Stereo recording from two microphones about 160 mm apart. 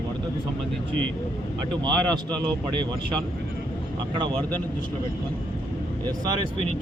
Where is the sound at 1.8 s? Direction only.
25° right (ahead or behind).